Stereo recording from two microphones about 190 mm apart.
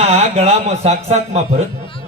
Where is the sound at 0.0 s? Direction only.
35° right (ahead or behind).